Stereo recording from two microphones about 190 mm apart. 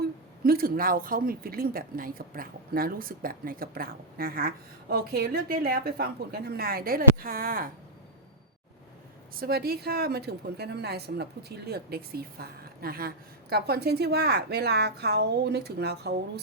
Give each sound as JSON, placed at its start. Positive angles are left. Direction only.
{"t": 0.4, "sound": "a woman's voice", "side_deg": -50}
{"t": 9.3, "sound": "a woman's voice", "side_deg": -55}